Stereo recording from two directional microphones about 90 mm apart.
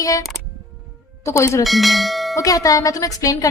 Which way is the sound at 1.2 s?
30° left (ahead or behind).